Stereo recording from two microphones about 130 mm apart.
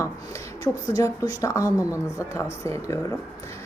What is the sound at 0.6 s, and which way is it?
A woman's voice, 30° left (ahead or behind).